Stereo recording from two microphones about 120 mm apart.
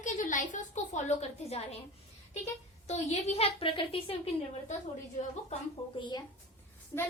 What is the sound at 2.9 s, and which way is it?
A woman's voice, 60° left (ahead or behind).